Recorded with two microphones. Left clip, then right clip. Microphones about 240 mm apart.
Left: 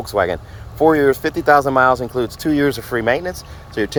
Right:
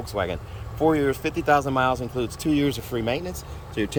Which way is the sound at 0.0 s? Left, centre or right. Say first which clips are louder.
Left 10 dB; left.